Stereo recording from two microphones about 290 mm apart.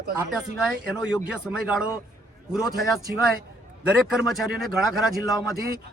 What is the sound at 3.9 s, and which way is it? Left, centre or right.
A man's voice, centre.